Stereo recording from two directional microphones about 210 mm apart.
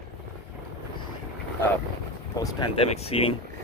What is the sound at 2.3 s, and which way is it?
Speech, 25° left (ahead or behind).